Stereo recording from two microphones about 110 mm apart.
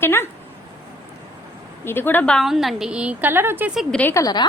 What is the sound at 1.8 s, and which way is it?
Speech, 20° left (ahead or behind).